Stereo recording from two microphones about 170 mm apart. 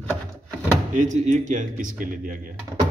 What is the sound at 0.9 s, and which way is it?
Speech, 45° right (ahead or behind).